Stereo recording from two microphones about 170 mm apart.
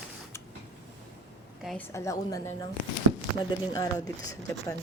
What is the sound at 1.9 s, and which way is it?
Speech, 20° left (ahead or behind).